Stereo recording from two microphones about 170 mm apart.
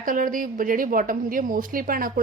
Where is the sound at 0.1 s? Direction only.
55° right (ahead or behind).